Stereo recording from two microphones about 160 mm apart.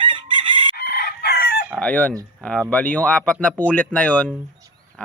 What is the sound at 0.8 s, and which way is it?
Chicken, 85° left.